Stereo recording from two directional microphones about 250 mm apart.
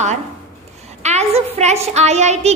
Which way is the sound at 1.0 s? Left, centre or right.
Right.